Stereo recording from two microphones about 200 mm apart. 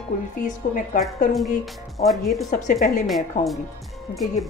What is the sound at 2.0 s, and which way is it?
Speech, centre (ahead or behind).